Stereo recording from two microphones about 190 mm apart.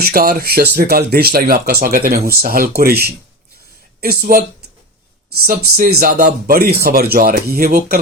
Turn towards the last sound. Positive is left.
turn(degrees=-50)  # may be behind; listen again after turning